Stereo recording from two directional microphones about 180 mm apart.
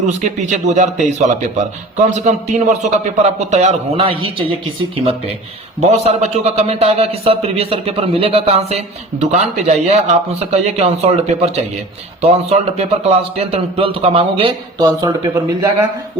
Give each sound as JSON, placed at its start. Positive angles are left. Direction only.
{"t": 0.0, "sound": "a man's voice", "side_deg": -40}
{"t": 2.0, "sound": "a man's voice", "side_deg": -40}
{"t": 5.8, "sound": "a man's voice", "side_deg": -35}
{"t": 15.0, "sound": "speech", "side_deg": -20}